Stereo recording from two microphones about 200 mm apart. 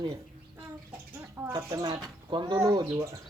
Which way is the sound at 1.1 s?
10° right (ahead or behind).